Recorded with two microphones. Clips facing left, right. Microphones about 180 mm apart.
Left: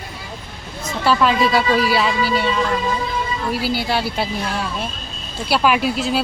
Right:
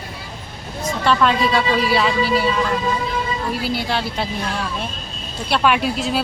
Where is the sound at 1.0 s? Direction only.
5° left (ahead or behind).